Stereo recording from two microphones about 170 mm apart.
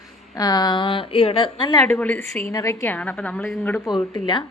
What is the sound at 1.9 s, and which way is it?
A woman's voice, 10° left (ahead or behind).